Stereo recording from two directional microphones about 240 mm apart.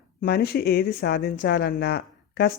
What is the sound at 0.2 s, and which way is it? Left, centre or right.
Speech, left.